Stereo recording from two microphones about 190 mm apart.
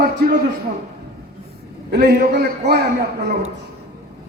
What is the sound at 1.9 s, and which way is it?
Speech, 55° right (ahead or behind).